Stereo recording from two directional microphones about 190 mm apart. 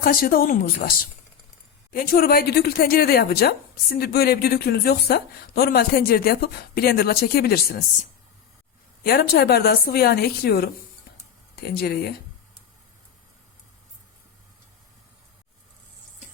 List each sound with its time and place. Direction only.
0.0 s a woman's voice: 50° left (ahead or behind)
9.0 s a woman's voice: 55° left (ahead or behind)